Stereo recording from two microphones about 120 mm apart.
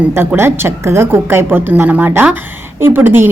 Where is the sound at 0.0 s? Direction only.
15° right (ahead or behind).